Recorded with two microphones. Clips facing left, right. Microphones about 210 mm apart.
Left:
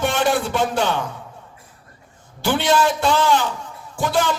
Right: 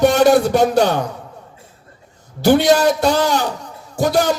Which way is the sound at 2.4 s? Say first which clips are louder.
Right 6 dB; 40° right (ahead or behind).